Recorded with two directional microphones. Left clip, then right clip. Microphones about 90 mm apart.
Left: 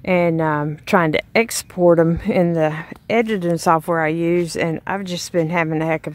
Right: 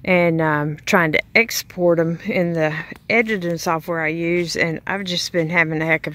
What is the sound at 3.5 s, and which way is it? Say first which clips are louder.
Speech: left 5 dB; 40° left (ahead or behind).